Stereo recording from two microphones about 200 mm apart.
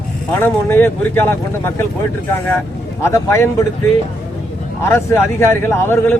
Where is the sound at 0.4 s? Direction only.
10° left (ahead or behind).